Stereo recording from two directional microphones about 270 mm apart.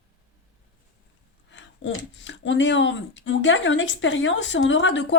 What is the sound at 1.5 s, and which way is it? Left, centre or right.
Speech, left.